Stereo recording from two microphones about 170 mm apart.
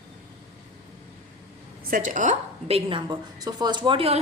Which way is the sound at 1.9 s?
50° right (ahead or behind).